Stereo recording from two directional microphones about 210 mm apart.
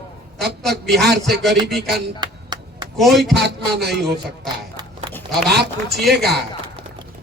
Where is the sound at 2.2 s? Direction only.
20° right (ahead or behind).